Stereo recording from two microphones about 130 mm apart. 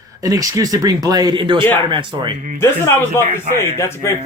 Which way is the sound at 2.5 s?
20° left (ahead or behind).